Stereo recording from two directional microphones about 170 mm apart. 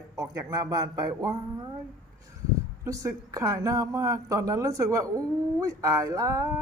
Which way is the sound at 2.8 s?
20° right (ahead or behind).